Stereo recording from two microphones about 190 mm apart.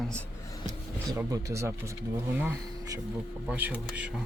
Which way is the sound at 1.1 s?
15° right (ahead or behind).